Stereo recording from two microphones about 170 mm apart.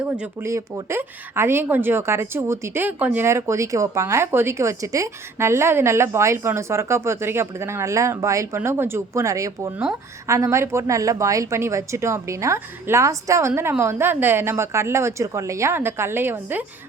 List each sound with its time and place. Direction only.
0.4 s speech: 15° right (ahead or behind)